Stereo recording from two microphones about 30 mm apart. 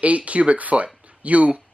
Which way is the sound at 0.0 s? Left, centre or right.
Right.